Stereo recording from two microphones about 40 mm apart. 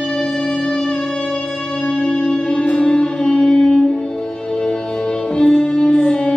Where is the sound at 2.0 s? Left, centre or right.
Centre.